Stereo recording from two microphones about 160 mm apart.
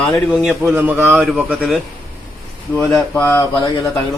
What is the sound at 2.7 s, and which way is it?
Speech, 10° left (ahead or behind).